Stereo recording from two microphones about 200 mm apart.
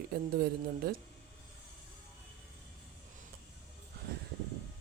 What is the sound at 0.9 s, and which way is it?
Speech, 50° right (ahead or behind).